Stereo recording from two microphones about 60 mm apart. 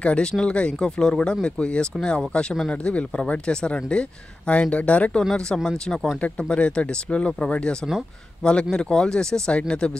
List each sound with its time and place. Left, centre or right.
0.0 s speech: centre
5.3 s speech: centre
6.5 s speech: left